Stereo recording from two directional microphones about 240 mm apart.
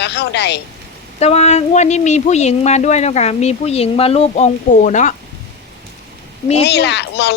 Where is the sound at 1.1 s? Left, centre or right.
Left.